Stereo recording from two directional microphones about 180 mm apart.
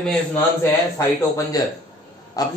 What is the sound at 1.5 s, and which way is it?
Speech, 20° left (ahead or behind).